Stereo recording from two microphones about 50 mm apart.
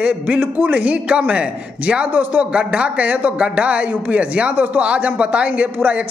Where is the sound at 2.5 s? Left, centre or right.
Right.